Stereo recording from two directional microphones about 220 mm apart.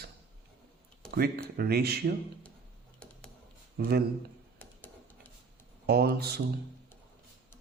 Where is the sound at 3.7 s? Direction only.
45° right (ahead or behind).